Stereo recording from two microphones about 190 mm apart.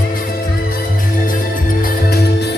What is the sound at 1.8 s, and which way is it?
Music, 55° left (ahead or behind).